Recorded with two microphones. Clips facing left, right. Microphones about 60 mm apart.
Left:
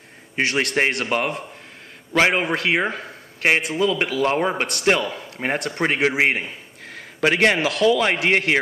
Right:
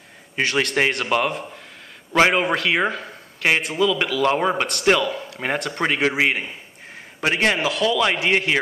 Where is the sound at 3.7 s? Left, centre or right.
Left.